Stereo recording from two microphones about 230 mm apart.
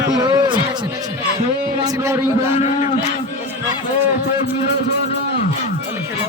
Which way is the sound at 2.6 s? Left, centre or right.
Left.